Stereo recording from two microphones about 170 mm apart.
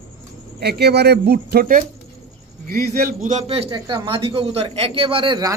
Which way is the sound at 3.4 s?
35° right (ahead or behind).